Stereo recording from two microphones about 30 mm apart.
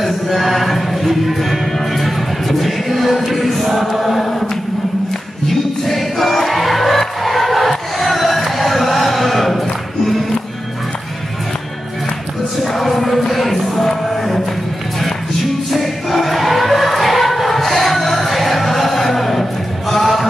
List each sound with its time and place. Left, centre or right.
0.0 s music: centre
5.5 s music: centre
7.0 s crowd: centre
12.7 s music: centre
15.7 s choir: centre
19.9 s music: centre